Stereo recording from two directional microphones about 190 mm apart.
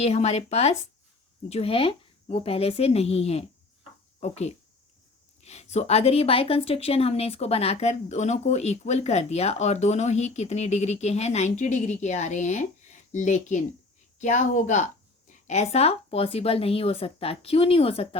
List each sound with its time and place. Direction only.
0.0 s speech: 35° left (ahead or behind)